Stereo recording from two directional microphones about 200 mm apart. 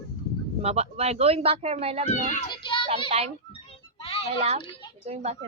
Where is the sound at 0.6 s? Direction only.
30° right (ahead or behind).